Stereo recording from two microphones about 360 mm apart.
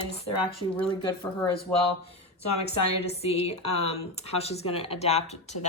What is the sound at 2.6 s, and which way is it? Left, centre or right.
Speech, centre.